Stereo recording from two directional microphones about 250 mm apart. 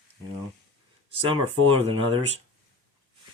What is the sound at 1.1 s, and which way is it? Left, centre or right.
Speech, right.